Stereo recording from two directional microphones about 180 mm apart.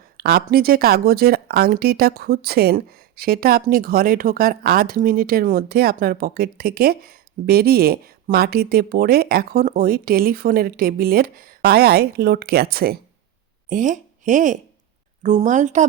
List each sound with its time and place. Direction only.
0.2 s speech: 55° right (ahead or behind)
13.7 s speech: 45° right (ahead or behind)